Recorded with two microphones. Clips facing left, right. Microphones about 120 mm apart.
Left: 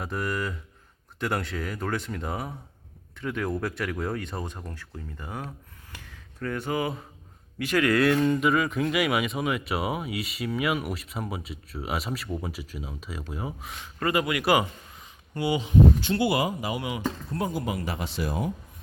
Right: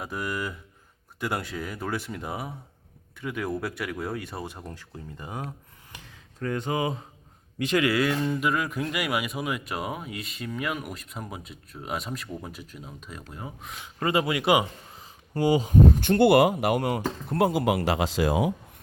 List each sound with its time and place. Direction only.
0.0 s speech: 5° right (ahead or behind); by 7.9 s 25° right (ahead or behind)
7.9 s speech: 5° right (ahead or behind)
13.8 s speech: 25° right (ahead or behind)
15.4 s speech: 40° right (ahead or behind)
16.0 s speech: 55° right (ahead or behind)
17.2 s speech: 75° right (ahead or behind)